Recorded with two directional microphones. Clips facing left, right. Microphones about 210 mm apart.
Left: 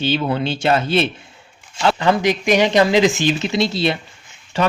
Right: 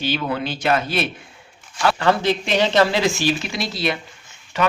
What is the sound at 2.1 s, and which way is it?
Speech, 15° left (ahead or behind).